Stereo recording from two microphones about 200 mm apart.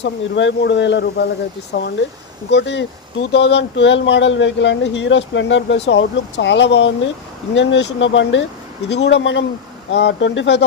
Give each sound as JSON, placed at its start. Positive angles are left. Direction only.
{"t": 0.0, "sound": "speech", "side_deg": 65}